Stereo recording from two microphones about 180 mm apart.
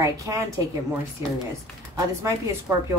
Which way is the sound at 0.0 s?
20° right (ahead or behind).